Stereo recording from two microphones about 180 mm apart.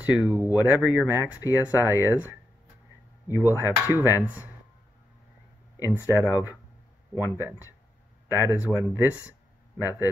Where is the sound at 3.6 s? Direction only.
15° right (ahead or behind).